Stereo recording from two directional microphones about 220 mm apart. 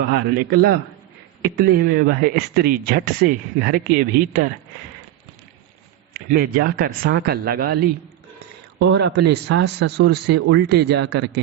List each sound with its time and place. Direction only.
0.0 s speech: 45° right (ahead or behind)
6.1 s speech: 45° right (ahead or behind)